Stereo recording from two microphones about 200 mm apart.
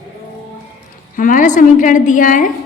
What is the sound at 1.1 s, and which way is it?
A woman's voice, 40° left (ahead or behind).